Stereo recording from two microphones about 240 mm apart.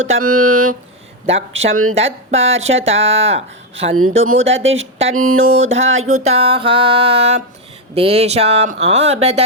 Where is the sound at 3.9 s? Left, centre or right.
Right.